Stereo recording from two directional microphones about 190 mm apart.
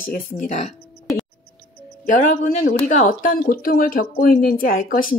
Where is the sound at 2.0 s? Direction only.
40° left (ahead or behind).